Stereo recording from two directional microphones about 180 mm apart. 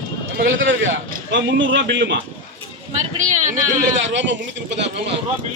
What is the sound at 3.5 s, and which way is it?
Speech, 45° right (ahead or behind).